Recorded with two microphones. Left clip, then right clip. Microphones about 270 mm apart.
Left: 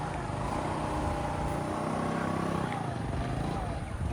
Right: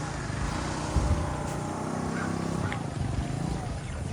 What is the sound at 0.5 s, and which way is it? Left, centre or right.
Vehicle, left.